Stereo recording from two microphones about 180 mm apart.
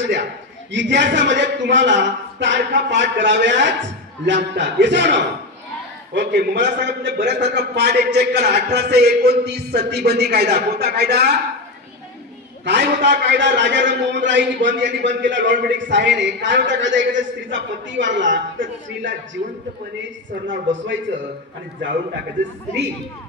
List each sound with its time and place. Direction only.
0.7 s a man's voice: 85° right; by 11.3 s 65° right (ahead or behind)
12.6 s a man's voice: 75° right (ahead or behind)
20.4 s a man's voice: 90° right